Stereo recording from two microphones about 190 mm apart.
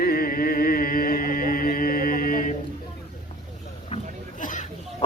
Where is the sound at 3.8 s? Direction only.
40° left (ahead or behind).